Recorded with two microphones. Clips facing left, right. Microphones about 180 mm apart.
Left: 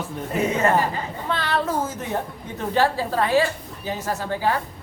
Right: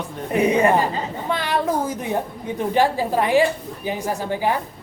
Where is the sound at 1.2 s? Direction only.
15° right (ahead or behind).